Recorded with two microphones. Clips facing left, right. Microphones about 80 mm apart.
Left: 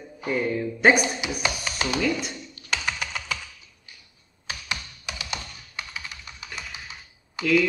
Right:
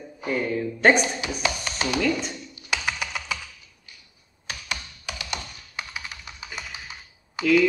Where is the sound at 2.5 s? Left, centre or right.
Centre.